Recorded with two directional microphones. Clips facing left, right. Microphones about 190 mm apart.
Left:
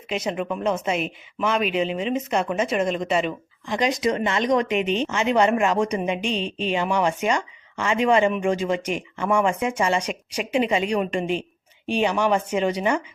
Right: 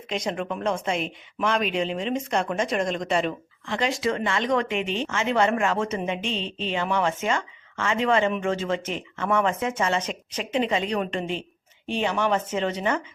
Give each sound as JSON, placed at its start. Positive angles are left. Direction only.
{"t": 0.1, "sound": "a woman's voice", "side_deg": 5}
{"t": 3.7, "sound": "speech", "side_deg": 20}